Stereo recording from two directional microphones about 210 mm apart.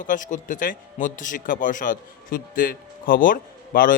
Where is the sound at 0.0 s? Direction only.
40° left (ahead or behind).